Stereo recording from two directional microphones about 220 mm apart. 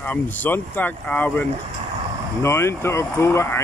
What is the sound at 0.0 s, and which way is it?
Speech, 5° left (ahead or behind).